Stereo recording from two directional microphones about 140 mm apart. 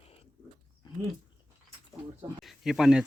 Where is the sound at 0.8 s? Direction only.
30° left (ahead or behind).